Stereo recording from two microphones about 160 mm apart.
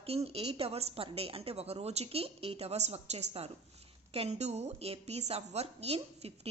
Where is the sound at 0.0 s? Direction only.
40° right (ahead or behind).